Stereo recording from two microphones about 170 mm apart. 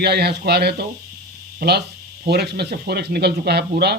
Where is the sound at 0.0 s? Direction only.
75° right (ahead or behind).